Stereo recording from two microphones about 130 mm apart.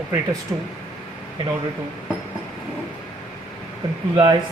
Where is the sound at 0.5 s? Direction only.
15° right (ahead or behind).